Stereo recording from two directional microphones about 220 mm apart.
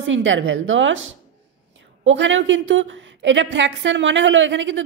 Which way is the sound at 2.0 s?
60° right (ahead or behind).